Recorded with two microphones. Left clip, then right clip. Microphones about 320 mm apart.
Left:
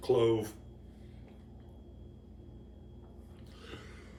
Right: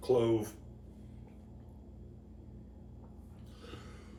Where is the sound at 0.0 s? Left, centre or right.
Centre.